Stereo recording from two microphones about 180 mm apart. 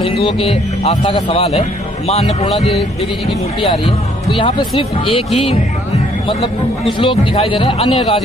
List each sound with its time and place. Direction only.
0.0 s a man's voice: 30° left (ahead or behind)
7.0 s speech: 30° left (ahead or behind)